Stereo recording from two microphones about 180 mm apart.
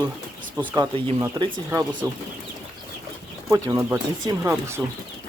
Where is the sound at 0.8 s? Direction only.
20° right (ahead or behind).